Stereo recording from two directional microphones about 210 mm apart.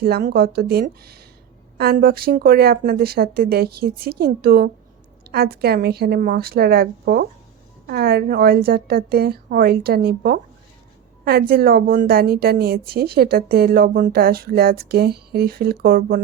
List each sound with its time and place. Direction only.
0.0 s a woman's voice: 45° right (ahead or behind)